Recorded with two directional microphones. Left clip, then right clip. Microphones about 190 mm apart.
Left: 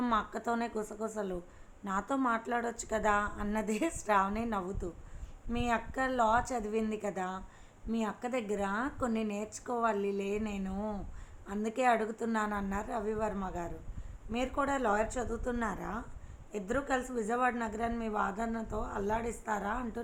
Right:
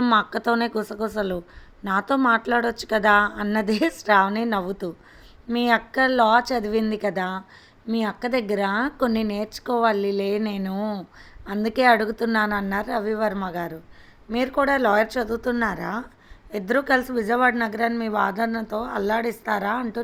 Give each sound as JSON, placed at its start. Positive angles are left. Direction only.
{"t": 0.0, "sound": "a woman's voice", "side_deg": -55}